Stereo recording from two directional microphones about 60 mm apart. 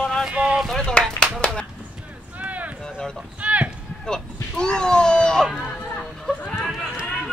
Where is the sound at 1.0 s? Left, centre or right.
Centre.